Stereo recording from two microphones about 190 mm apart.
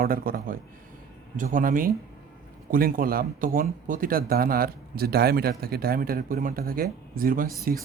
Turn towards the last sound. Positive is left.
turn(degrees=-50)  # may be behind; listen again after turning